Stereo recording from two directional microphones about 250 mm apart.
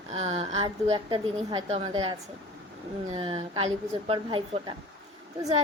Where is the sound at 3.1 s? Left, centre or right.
Right.